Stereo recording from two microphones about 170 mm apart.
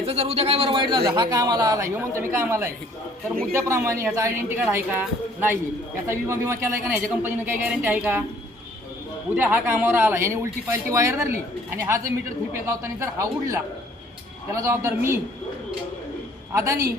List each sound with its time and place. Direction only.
0.0 s a woman's voice: 35° right (ahead or behind); by 8.2 s 10° right (ahead or behind)
9.3 s a man's voice: 10° right (ahead or behind)
16.6 s a man's voice: 15° right (ahead or behind)